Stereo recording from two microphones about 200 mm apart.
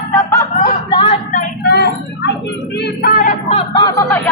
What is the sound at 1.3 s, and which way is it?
Vehicle, 45° left (ahead or behind).